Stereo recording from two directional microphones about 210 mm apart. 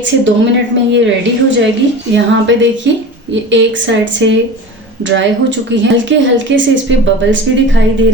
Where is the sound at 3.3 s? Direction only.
60° right (ahead or behind).